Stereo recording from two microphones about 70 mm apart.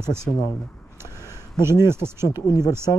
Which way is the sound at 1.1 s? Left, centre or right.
Left.